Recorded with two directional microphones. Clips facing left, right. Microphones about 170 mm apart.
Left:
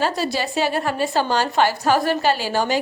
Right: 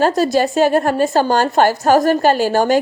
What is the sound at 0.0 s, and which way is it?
A woman's voice, 45° right (ahead or behind).